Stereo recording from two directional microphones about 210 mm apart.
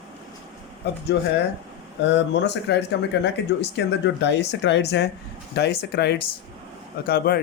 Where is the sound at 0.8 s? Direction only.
50° left (ahead or behind).